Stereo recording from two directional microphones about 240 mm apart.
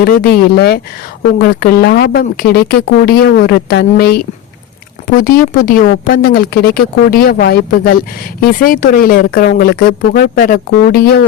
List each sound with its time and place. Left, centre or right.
0.0 s speech: left